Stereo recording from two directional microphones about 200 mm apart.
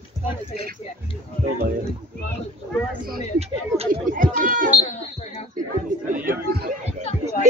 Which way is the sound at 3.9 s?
45° right (ahead or behind).